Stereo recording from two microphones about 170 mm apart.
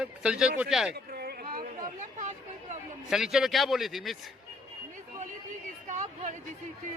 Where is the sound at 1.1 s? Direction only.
60° right (ahead or behind).